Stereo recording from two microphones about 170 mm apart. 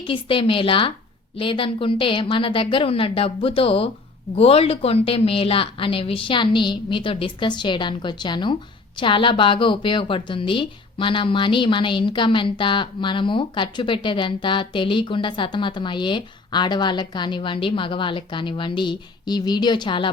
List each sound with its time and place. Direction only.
0.1 s a woman's voice: 30° left (ahead or behind)